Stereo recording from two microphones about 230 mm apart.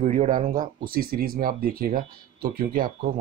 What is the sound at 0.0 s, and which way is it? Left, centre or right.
Speech, right.